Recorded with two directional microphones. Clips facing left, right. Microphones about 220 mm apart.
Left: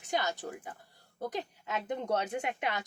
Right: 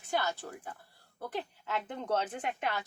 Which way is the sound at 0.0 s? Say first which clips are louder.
Even; 15° left (ahead or behind).